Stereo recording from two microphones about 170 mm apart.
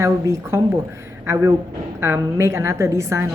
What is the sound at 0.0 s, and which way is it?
A woman's voice, 15° right (ahead or behind).